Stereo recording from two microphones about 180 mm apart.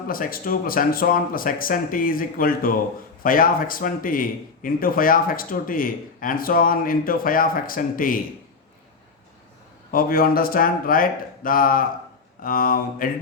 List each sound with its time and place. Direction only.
0.1 s a man's voice: 50° left (ahead or behind)
9.9 s a man's voice: 55° left (ahead or behind)